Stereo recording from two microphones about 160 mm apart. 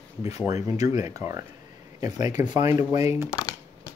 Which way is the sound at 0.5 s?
20° right (ahead or behind).